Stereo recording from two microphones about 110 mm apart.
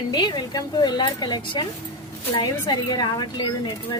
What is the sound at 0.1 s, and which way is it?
A woman's voice, 40° left (ahead or behind).